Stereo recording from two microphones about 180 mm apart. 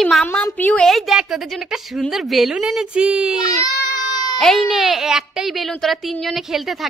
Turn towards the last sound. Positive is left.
turn(degrees=0)  # may be behind; listen again after turning